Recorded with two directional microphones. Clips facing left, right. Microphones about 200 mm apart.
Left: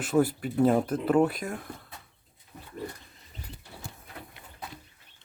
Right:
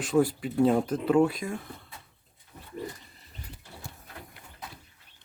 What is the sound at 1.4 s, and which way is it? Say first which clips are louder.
Speech: right 1 dB; 10° right (ahead or behind).